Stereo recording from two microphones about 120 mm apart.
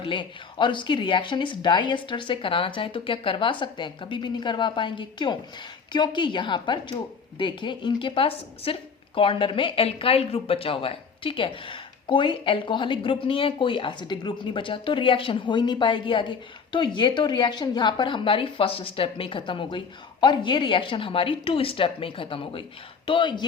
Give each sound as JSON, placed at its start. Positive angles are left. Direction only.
{"t": 0.0, "sound": "a woman's voice", "side_deg": 45}